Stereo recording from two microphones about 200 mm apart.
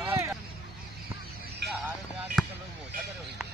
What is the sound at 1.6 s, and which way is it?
Music, 60° right (ahead or behind).